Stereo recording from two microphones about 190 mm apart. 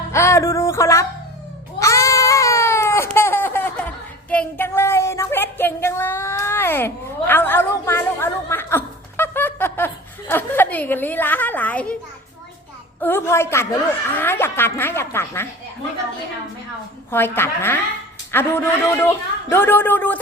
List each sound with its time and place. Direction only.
0.1 s music: 15° left (ahead or behind)
1.8 s baby cry: 15° left (ahead or behind)
13.0 s a man's voice: 10° left (ahead or behind)
17.1 s a man's voice: 10° left (ahead or behind)